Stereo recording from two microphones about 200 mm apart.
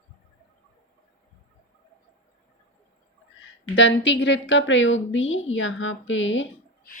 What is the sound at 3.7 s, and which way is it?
A woman's voice, 65° left (ahead or behind).